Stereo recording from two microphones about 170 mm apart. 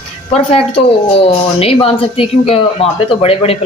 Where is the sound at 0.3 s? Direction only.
35° left (ahead or behind).